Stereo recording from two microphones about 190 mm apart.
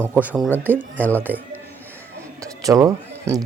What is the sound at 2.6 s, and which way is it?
Speech, 20° right (ahead or behind).